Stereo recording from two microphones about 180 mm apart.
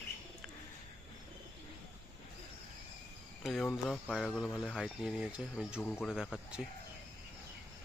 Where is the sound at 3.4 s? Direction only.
5° left (ahead or behind).